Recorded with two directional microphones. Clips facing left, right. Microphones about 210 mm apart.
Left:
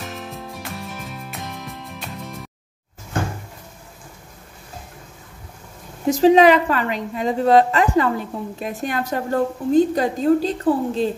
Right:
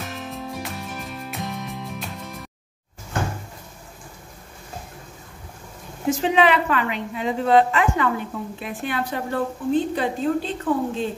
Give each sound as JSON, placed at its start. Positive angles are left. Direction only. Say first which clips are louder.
{"t": 0.0, "sound": "music", "louder": "even", "side_deg": 0}
{"t": 6.0, "sound": "a woman's voice", "louder": "left 6 dB", "side_deg": 40}